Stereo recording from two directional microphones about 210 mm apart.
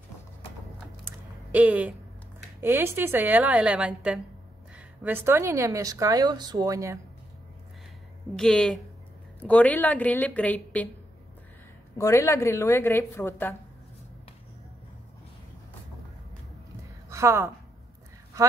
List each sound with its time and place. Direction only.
1.0 s a sound: 5° right (ahead or behind)
2.6 s a woman's voice: 10° right (ahead or behind)
8.4 s a woman's voice: centre (ahead or behind)
12.0 s a woman's voice: 15° left (ahead or behind)
17.1 s a woman's voice: 10° right (ahead or behind)